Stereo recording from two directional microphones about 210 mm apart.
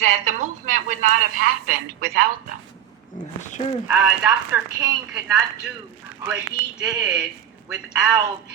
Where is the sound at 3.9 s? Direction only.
5° right (ahead or behind).